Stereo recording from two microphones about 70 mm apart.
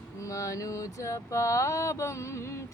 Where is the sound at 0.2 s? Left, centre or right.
Left.